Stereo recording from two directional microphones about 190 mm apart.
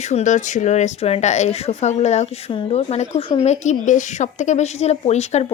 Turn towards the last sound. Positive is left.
turn(degrees=35)  # may be behind; listen again after turning